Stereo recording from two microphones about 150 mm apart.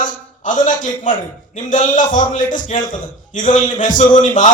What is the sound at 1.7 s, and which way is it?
A man's voice, 60° left (ahead or behind).